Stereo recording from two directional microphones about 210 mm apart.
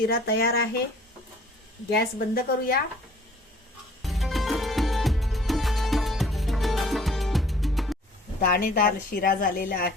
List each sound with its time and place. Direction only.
0.1 s a woman's voice: 50° left (ahead or behind)
1.9 s a woman's voice: 45° left (ahead or behind)
4.0 s music: centre (ahead or behind)
8.4 s a woman's voice: 45° left (ahead or behind)